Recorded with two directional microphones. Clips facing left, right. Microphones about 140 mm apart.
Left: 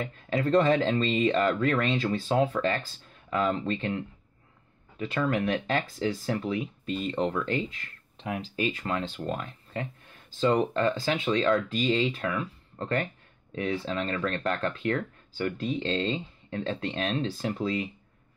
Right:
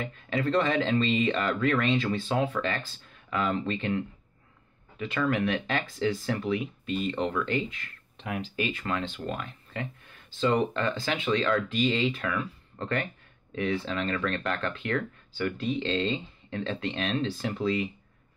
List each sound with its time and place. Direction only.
0.5 s speech: 40° left (ahead or behind)
5.2 s speech: 25° left (ahead or behind)
5.5 s speech: 40° left (ahead or behind)